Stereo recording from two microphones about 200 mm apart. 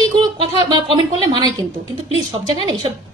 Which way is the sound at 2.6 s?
25° right (ahead or behind).